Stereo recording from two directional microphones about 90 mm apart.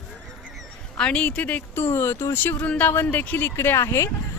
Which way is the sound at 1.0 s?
10° left (ahead or behind).